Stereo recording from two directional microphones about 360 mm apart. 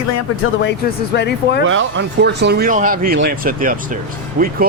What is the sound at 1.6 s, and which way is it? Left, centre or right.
Speech, right.